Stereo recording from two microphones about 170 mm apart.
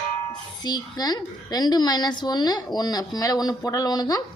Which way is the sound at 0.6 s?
25° left (ahead or behind).